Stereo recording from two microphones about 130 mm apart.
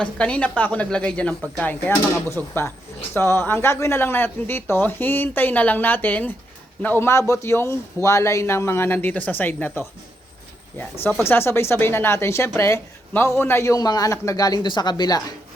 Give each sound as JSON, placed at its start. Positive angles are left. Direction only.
{"t": 0.0, "sound": "speech", "side_deg": 10}
{"t": 11.2, "sound": "speech", "side_deg": 20}